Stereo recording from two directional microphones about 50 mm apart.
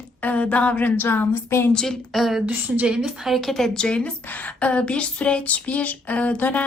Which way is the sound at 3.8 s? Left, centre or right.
Left.